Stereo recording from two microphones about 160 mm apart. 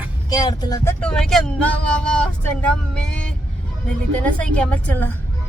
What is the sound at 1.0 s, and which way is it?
A woman's voice, 5° left (ahead or behind).